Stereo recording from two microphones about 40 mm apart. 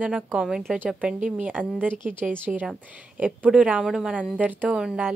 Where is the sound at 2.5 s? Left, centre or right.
Centre.